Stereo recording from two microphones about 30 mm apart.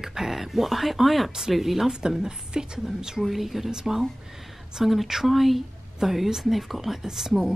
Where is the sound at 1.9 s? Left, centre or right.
Centre.